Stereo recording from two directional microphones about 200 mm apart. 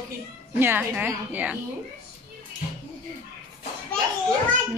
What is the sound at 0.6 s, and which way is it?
Speech, 10° right (ahead or behind).